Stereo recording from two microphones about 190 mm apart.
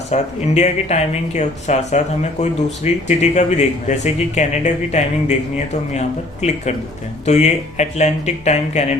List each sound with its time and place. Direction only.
0.1 s speech: 35° left (ahead or behind)